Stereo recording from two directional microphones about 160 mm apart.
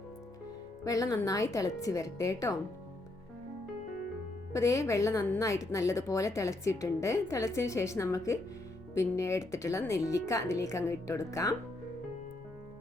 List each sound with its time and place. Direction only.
0.9 s a woman's voice: 20° left (ahead or behind)
4.5 s a woman's voice: 20° left (ahead or behind)